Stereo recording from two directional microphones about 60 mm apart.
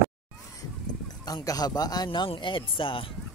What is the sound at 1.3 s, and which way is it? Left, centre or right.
Speech, left.